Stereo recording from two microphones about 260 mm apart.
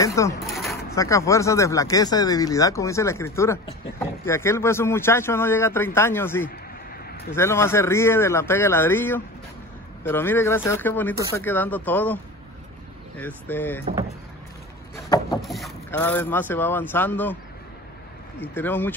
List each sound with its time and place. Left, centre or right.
0.0 s bird: centre
0.4 s a sound: centre
0.9 s speech: centre
13.2 s speech: centre
13.8 s speech: right
15.4 s speech: centre
18.4 s speech: centre